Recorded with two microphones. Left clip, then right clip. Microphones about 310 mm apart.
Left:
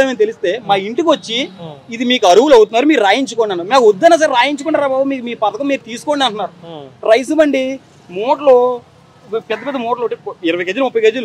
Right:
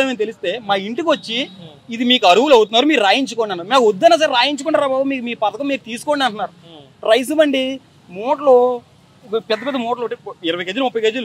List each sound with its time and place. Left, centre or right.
0.0 s speech: right
4.6 s speech: right
9.5 s speech: right
9.8 s speech: right